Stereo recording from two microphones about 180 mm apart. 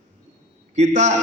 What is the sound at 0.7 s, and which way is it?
Speech, 40° right (ahead or behind).